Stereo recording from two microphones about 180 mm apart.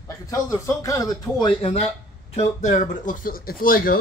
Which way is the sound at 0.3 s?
15° left (ahead or behind).